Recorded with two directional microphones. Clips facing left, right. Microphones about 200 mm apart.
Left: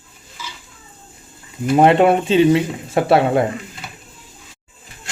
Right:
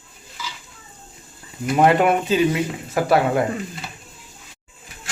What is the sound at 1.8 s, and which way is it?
Speech, 25° left (ahead or behind).